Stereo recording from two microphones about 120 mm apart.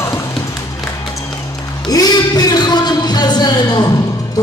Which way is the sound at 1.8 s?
35° left (ahead or behind).